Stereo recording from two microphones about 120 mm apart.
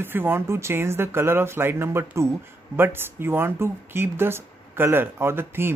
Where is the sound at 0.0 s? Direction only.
15° right (ahead or behind).